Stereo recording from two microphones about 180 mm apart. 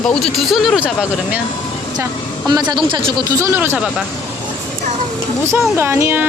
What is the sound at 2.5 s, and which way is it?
Speech, 25° right (ahead or behind).